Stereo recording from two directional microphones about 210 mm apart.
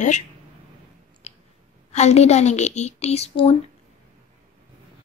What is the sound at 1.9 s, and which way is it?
A woman's voice, 30° left (ahead or behind).